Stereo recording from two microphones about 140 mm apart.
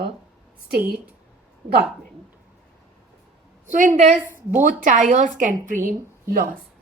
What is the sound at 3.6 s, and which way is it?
A woman's voice, 70° right (ahead or behind).